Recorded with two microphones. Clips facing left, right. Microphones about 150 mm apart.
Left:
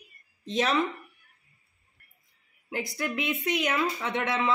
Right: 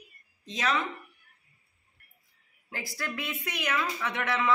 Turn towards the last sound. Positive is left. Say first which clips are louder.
# left 2 dB
turn(degrees=25)  # may be behind; listen again after turning